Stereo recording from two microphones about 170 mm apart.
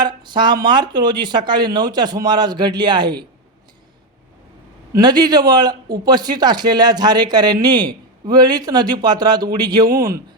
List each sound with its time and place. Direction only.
0.0 s a sound: 25° right (ahead or behind)
0.6 s speech: 25° right (ahead or behind)
4.9 s speech: 25° right (ahead or behind)